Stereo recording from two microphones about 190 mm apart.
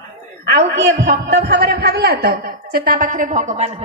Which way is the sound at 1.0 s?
60° right (ahead or behind).